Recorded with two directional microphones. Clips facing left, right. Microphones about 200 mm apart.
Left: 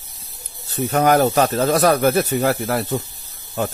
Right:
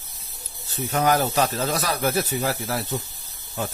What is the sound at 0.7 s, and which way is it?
Speech, 60° left (ahead or behind).